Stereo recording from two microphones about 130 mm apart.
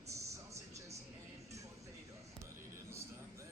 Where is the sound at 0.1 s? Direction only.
25° right (ahead or behind).